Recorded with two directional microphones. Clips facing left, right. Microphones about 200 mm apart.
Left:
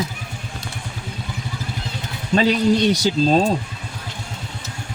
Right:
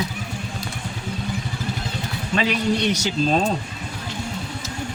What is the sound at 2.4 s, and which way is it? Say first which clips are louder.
A man's voice: left 5 dB; 35° left (ahead or behind).